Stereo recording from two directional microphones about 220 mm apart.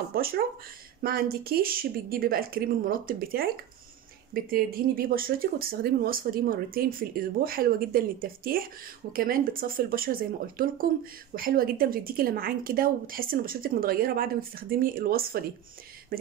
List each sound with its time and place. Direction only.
0.1 s speech: 45° right (ahead or behind)